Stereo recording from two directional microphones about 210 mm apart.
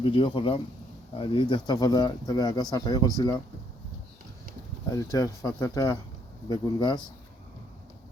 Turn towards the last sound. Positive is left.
turn(degrees=20)  # may be behind; listen again after turning